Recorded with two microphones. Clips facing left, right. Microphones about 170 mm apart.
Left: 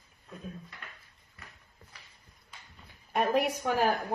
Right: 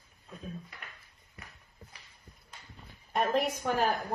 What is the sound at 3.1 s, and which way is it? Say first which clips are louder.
Speech: left 1 dB; 10° left (ahead or behind).